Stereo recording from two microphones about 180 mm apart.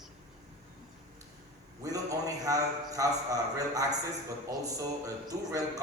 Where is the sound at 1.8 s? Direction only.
20° right (ahead or behind).